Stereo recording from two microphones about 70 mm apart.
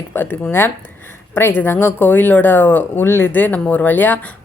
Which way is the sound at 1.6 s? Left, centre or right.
Left.